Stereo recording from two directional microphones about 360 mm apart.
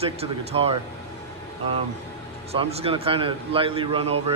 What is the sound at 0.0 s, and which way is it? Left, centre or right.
Speech, centre.